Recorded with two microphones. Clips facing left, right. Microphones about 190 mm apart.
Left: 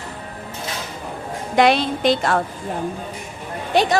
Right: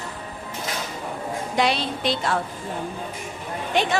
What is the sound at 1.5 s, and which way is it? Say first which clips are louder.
Speech: left 7 dB; 55° left (ahead or behind).